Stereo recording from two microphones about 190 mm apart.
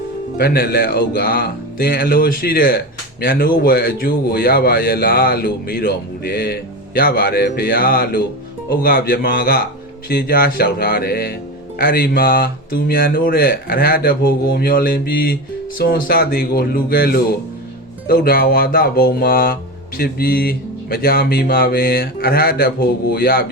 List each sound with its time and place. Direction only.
0.3 s a man's voice: 55° left (ahead or behind)